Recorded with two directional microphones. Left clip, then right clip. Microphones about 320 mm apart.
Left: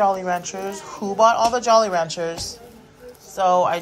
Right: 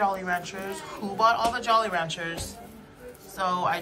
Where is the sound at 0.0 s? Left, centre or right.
Centre.